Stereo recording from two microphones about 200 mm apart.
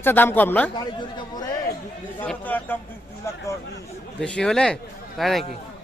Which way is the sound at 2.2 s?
10° left (ahead or behind).